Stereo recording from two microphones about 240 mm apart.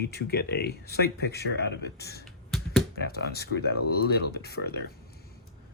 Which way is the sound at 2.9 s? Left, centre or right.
Left.